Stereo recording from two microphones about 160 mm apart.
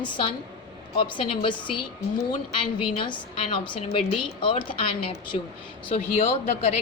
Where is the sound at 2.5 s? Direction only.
30° left (ahead or behind).